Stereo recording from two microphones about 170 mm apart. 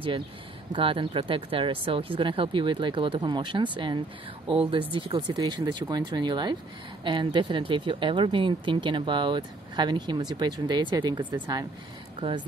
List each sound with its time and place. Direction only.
0.7 s speech: 30° right (ahead or behind)